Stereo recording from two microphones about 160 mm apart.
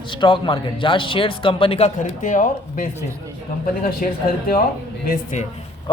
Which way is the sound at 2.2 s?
55° left (ahead or behind).